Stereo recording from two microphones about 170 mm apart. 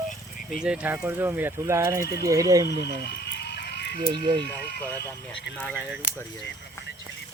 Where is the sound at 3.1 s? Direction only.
70° left (ahead or behind).